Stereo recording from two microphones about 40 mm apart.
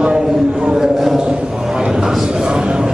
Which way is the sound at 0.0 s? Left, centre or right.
Centre.